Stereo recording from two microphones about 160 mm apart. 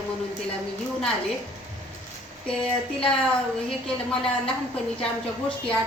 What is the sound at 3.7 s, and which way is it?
Speech, 5° left (ahead or behind).